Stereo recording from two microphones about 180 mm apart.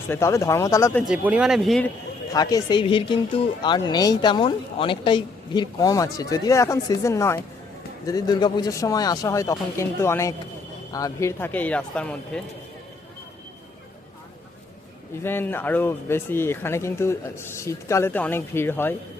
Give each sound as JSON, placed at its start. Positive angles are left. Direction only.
{"t": 0.1, "sound": "speech", "side_deg": 15}
{"t": 0.9, "sound": "speech", "side_deg": -5}
{"t": 2.3, "sound": "speech", "side_deg": 20}
{"t": 15.2, "sound": "speech", "side_deg": 10}